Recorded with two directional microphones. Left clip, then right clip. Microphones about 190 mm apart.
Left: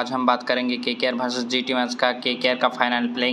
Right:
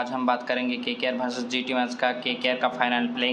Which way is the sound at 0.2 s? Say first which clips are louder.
Left 5 dB; 15° left (ahead or behind).